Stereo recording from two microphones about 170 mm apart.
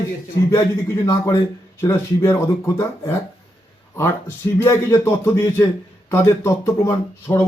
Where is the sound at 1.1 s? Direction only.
15° left (ahead or behind).